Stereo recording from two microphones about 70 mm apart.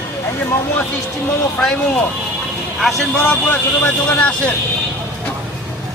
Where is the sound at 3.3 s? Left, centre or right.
Centre.